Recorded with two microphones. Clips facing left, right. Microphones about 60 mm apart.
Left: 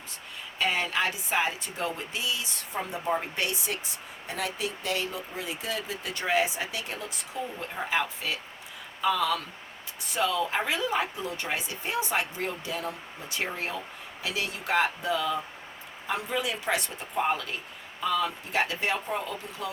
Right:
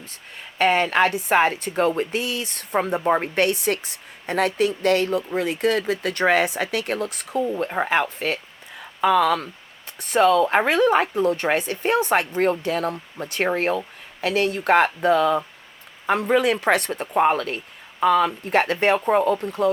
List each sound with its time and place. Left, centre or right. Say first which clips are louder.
0.3 s speech: right 9 dB; right